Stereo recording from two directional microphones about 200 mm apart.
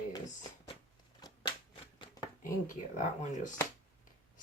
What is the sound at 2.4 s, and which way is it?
Speech, 40° left (ahead or behind).